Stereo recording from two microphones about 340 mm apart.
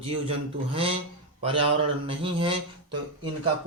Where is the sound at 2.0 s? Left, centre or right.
Centre.